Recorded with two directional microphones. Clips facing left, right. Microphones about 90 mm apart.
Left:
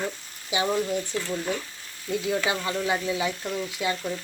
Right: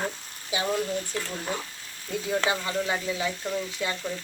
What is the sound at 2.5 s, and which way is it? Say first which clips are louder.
Speech: left 1 dB; 5° left (ahead or behind).